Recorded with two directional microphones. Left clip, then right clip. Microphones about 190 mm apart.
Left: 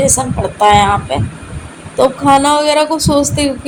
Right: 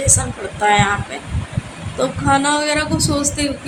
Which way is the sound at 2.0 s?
25° left (ahead or behind).